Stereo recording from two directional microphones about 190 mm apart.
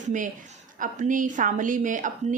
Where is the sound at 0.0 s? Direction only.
40° right (ahead or behind).